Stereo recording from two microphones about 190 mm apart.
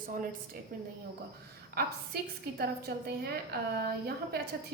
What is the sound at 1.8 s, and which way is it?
A woman's voice, 55° right (ahead or behind).